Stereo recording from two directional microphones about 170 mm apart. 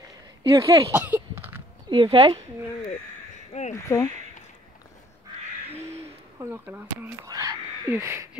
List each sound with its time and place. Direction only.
0.4 s speech: 30° right (ahead or behind)
0.9 s a sound: 10° right (ahead or behind)
1.9 s speech: 30° right (ahead or behind)
3.8 s speech: 15° left (ahead or behind)
5.7 s owl: 40° right (ahead or behind)
6.5 s speech: 10° right (ahead or behind)
7.2 s a sound: 20° right (ahead or behind)